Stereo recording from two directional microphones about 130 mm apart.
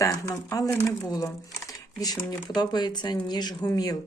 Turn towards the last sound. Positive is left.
turn(degrees=30)  # may be behind; listen again after turning